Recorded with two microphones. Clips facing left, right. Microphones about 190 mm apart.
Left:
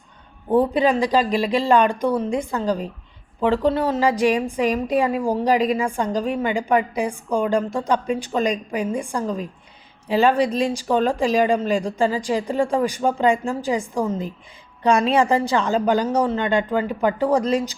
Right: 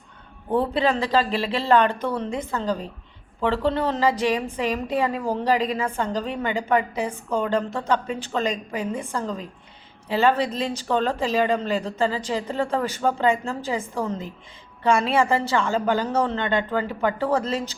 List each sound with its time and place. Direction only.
0.5 s a woman's voice: 15° left (ahead or behind)